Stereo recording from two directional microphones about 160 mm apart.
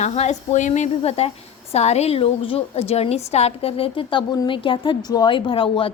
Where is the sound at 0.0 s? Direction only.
45° left (ahead or behind).